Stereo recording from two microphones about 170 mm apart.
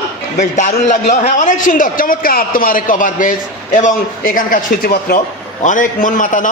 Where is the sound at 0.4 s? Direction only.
45° left (ahead or behind).